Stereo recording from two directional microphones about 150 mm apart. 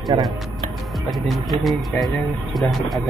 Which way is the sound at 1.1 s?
Centre (ahead or behind).